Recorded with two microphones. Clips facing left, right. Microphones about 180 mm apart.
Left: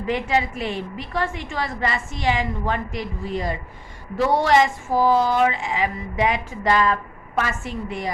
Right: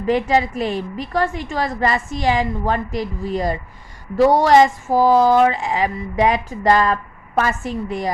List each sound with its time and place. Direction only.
0.1 s a woman's voice: 40° right (ahead or behind)